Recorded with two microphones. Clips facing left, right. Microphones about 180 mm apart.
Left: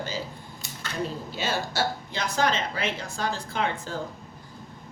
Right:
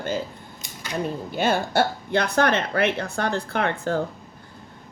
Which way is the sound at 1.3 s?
55° right (ahead or behind).